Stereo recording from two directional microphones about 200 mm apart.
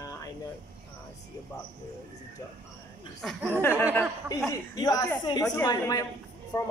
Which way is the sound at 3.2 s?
Centre (ahead or behind).